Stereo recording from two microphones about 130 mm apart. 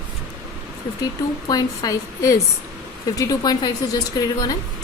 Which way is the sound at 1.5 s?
30° left (ahead or behind).